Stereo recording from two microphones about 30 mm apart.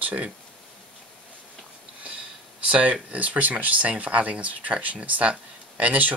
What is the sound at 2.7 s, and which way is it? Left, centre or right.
Speech, right.